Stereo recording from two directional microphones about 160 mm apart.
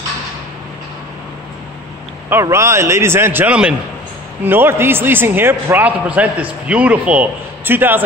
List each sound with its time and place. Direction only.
2.4 s a man's voice: 15° right (ahead or behind)